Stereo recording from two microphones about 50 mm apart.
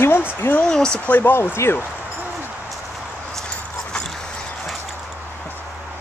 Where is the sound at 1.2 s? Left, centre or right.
Left.